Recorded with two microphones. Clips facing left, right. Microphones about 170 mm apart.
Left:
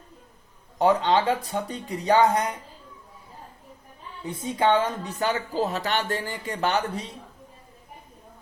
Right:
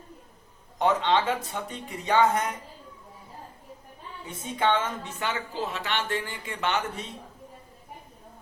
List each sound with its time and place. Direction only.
0.8 s speech: 40° left (ahead or behind)
4.3 s speech: 35° left (ahead or behind)